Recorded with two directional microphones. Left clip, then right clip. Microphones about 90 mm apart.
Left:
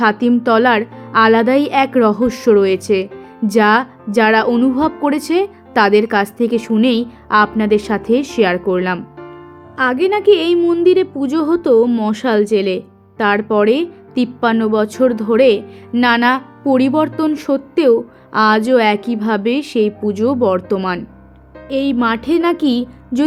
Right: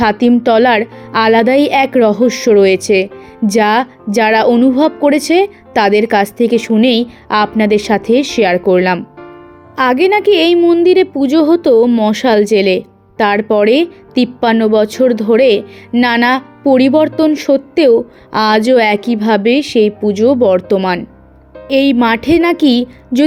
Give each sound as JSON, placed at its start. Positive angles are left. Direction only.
{"t": 0.0, "sound": "speech", "side_deg": -50}
{"t": 4.5, "sound": "a woman's voice", "side_deg": -35}
{"t": 9.7, "sound": "music", "side_deg": -70}
{"t": 10.6, "sound": "a woman's voice", "side_deg": -35}
{"t": 10.8, "sound": "a woman's voice", "side_deg": -55}
{"t": 21.7, "sound": "speech", "side_deg": -70}
{"t": 22.0, "sound": "music", "side_deg": -60}